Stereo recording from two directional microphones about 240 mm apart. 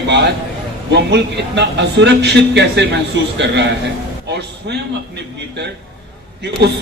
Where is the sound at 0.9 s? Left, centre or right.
Right.